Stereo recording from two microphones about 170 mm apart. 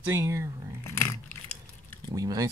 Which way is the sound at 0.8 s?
15° left (ahead or behind).